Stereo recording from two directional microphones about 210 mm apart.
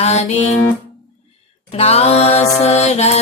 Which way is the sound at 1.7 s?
30° left (ahead or behind).